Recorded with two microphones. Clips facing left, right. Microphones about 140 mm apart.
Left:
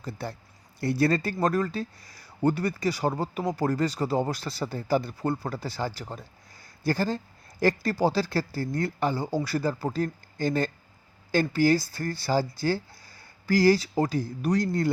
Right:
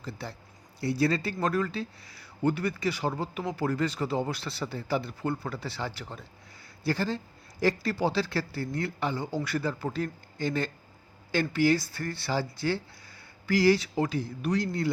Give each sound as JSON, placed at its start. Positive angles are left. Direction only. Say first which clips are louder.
{"t": 0.0, "sound": "speech", "louder": "left 4 dB", "side_deg": 45}